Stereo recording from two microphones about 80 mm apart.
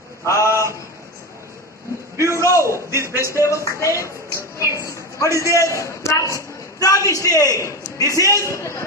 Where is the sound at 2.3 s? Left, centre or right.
Left.